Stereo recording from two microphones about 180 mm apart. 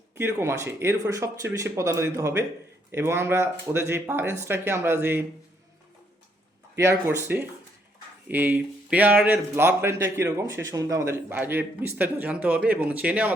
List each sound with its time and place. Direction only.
0.2 s speech: 15° right (ahead or behind)
6.7 s speech: 15° right (ahead or behind)